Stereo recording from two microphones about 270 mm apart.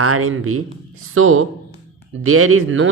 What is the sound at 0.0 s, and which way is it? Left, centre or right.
Speech, right.